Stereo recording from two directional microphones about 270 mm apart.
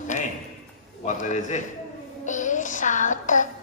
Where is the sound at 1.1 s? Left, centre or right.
Left.